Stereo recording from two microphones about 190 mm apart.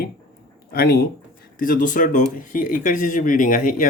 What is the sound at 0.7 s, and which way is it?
Speech, 55° left (ahead or behind).